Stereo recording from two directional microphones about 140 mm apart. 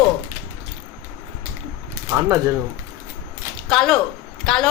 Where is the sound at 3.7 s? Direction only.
5° left (ahead or behind).